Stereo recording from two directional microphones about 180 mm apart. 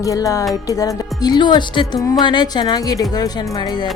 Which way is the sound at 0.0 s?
20° left (ahead or behind).